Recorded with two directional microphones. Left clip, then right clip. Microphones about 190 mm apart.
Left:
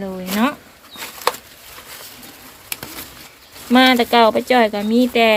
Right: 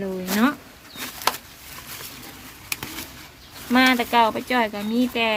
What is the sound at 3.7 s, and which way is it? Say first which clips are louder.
Speech: left 5 dB; 15° left (ahead or behind).